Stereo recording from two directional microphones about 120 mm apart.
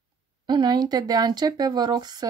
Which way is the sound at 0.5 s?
35° right (ahead or behind).